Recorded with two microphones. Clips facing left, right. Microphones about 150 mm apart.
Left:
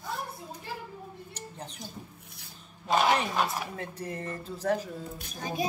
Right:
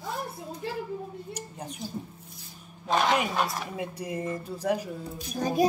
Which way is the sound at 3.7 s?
10° right (ahead or behind).